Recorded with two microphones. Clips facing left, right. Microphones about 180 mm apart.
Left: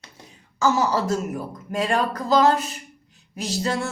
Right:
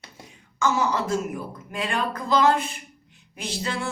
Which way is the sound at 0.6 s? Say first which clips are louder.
Left 3 dB; 35° left (ahead or behind).